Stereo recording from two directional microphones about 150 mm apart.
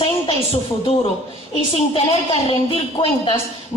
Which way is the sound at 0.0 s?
40° left (ahead or behind).